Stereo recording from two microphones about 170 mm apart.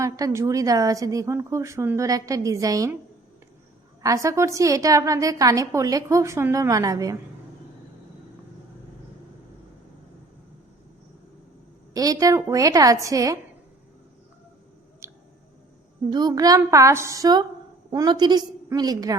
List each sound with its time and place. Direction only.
0.0 s a woman's voice: 20° right (ahead or behind)
4.0 s a woman's voice: 20° right (ahead or behind)
11.9 s a woman's voice: 20° right (ahead or behind)
15.0 s a sound: 15° right (ahead or behind)
16.0 s a woman's voice: 25° right (ahead or behind)